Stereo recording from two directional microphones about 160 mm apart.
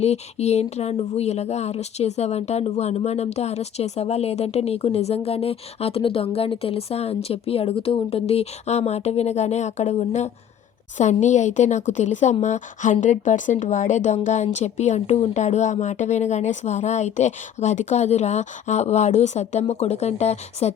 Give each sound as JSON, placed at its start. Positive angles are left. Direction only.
{"t": 0.0, "sound": "a woman's voice", "side_deg": 40}